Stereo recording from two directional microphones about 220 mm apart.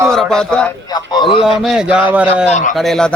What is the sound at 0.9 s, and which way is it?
Speech, 20° left (ahead or behind).